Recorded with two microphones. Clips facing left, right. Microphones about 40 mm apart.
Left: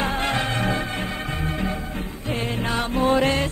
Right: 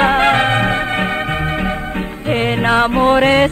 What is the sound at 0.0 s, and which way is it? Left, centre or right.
Music, right.